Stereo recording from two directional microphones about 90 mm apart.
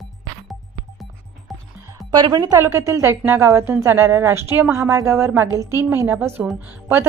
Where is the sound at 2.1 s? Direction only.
50° right (ahead or behind).